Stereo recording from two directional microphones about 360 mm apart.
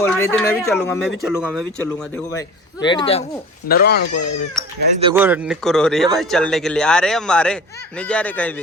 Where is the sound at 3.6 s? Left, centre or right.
Left.